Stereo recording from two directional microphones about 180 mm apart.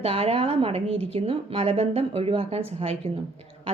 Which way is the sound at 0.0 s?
35° right (ahead or behind).